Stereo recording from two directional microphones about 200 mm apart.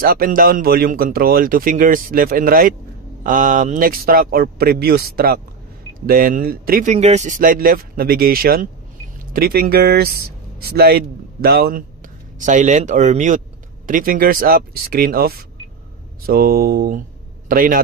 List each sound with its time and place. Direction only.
0.0 s speech: 45° right (ahead or behind)
12.4 s speech: 40° right (ahead or behind)